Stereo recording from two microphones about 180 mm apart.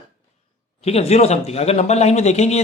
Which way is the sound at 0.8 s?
35° left (ahead or behind).